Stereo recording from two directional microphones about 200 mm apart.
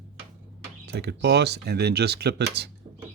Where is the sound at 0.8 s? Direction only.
55° right (ahead or behind).